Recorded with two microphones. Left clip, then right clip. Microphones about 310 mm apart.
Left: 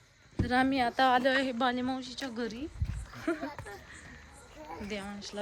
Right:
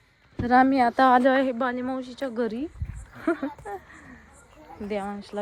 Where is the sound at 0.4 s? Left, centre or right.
Centre.